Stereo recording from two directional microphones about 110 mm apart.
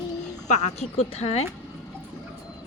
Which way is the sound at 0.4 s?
90° left.